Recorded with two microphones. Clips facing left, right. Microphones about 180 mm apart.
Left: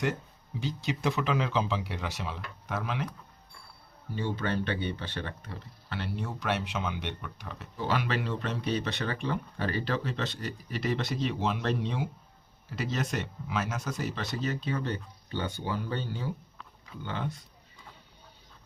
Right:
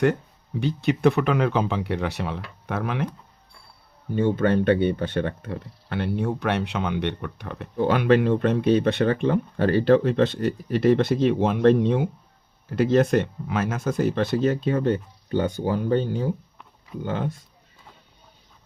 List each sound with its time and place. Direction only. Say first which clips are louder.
0.6 s speech: right 11 dB; 60° right (ahead or behind)
4.1 s speech: right 11 dB; 50° right (ahead or behind)